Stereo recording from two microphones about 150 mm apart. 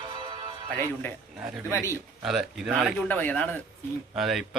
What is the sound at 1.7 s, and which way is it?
Speech, 20° left (ahead or behind).